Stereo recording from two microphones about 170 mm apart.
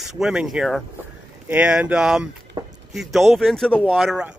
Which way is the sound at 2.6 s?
25° right (ahead or behind).